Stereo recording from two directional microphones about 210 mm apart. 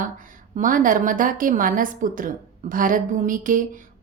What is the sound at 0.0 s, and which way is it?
A woman's voice, 40° right (ahead or behind).